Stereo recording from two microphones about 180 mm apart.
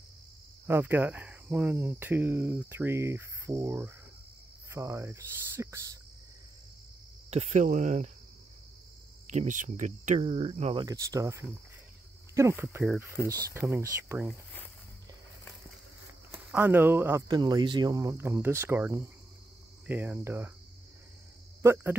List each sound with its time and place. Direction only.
0.7 s speech: 10° right (ahead or behind)
7.2 s speech: 40° right (ahead or behind)
9.3 s speech: 45° right (ahead or behind)
10.9 s speech: 15° right (ahead or behind)
12.7 s speech: 5° right (ahead or behind)
13.1 s speech: 15° right (ahead or behind)
16.3 s speech: 10° right (ahead or behind)
17.4 s speech: 25° right (ahead or behind)
21.6 s speech: 15° right (ahead or behind)